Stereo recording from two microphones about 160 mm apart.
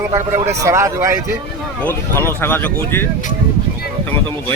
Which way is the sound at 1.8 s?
15° left (ahead or behind).